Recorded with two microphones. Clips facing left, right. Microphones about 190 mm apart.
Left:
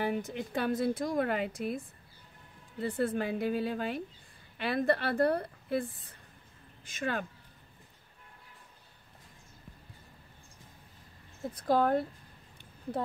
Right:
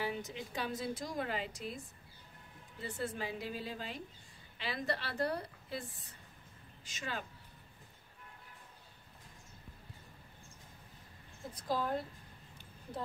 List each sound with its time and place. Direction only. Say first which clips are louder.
0.0 s a woman's voice: left 7 dB; 55° left (ahead or behind)
2.8 s a woman's voice: left 9 dB; 55° left (ahead or behind)
11.6 s a woman's voice: left 9 dB; 60° left (ahead or behind)